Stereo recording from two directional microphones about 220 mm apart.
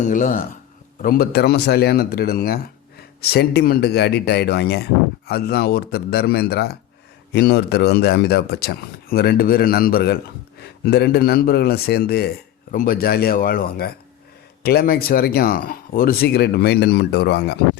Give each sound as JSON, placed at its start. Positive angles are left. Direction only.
{"t": 0.0, "sound": "speech", "side_deg": 35}